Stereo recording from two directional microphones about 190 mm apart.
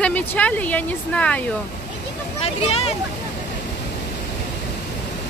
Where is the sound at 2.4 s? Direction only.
35° left (ahead or behind).